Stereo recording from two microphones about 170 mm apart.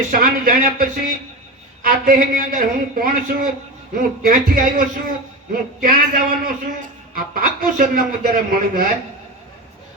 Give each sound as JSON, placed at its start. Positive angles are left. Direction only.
{"t": 0.1, "sound": "a man's voice", "side_deg": -60}